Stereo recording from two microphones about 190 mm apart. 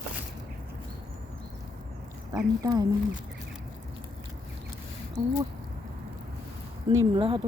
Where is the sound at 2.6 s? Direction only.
20° right (ahead or behind).